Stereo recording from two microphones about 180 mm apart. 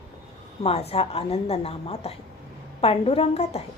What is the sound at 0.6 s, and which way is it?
A woman's voice, 35° left (ahead or behind).